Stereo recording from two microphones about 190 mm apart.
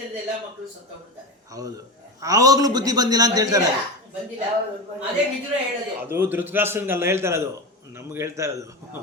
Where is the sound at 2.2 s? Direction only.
20° right (ahead or behind).